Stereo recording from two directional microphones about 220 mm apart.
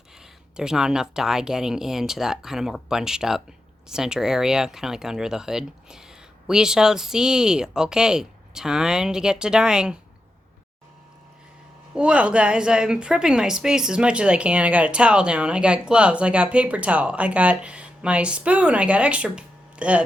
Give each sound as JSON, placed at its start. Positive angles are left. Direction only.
{"t": 0.5, "sound": "a woman's voice", "side_deg": -5}
{"t": 11.9, "sound": "a woman's voice", "side_deg": -5}